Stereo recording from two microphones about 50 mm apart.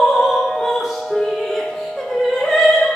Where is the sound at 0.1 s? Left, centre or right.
Centre.